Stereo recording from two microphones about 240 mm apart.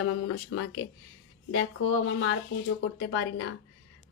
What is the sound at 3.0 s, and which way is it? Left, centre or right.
Speech, left.